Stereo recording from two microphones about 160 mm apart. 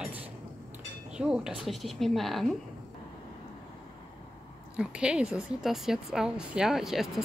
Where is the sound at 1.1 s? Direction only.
5° right (ahead or behind).